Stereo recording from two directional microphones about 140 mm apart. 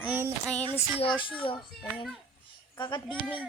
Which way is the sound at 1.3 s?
35° left (ahead or behind).